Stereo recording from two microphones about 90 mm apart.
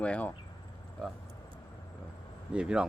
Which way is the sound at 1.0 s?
Centre (ahead or behind).